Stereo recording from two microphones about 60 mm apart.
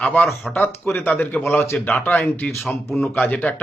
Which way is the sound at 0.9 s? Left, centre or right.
Left.